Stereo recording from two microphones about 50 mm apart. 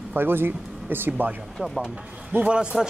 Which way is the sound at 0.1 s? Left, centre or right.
Right.